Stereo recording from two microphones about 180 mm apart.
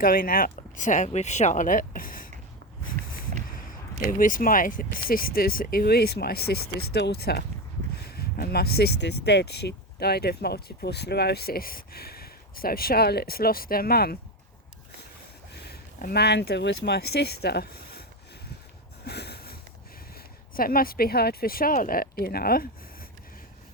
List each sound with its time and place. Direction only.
0.0 s speech: 50° left (ahead or behind)
3.5 s a sound: 50° left (ahead or behind)
4.2 s speech: 50° left (ahead or behind)
15.6 s speech: 60° left (ahead or behind)
19.0 s sniff: 65° left (ahead or behind)
20.1 s speech: 55° left (ahead or behind)